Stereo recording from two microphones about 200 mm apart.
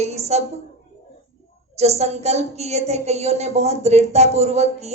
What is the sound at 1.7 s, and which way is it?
A woman's voice, 35° right (ahead or behind).